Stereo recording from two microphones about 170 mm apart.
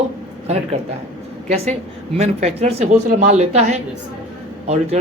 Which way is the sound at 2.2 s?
40° right (ahead or behind).